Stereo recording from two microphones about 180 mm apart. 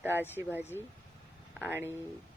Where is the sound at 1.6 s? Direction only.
15° right (ahead or behind).